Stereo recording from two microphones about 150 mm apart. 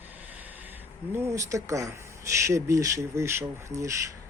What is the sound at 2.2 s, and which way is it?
Speech, 20° right (ahead or behind).